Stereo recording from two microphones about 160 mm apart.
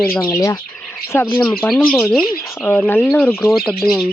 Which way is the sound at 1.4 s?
5° left (ahead or behind).